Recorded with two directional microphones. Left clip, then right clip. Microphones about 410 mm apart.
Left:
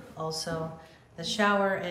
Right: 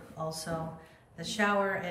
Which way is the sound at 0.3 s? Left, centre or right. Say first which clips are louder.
Left 5 dB; centre.